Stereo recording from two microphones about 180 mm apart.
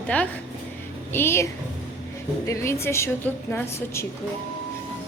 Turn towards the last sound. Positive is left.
turn(degrees=15)  # may be behind; listen again after turning